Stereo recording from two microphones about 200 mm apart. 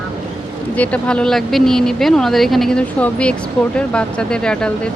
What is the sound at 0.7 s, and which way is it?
Speech, 5° left (ahead or behind).